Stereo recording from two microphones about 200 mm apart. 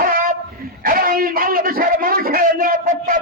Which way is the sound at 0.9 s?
45° right (ahead or behind).